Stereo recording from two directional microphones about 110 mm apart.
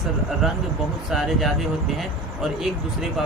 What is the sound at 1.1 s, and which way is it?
Speech, centre (ahead or behind).